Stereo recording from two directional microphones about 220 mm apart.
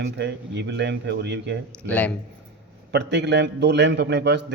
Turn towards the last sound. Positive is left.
turn(degrees=-50)  # may be behind; listen again after turning